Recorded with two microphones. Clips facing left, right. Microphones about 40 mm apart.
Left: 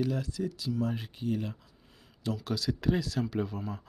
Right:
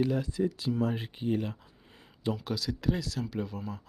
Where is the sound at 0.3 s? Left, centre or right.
Right.